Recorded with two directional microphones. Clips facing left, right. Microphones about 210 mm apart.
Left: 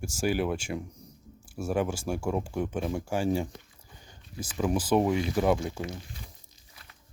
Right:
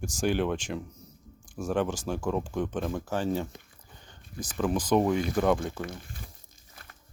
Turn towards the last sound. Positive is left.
turn(degrees=-50)  # may be behind; listen again after turning